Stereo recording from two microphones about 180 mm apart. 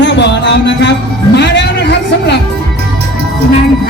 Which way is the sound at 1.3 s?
70° left (ahead or behind).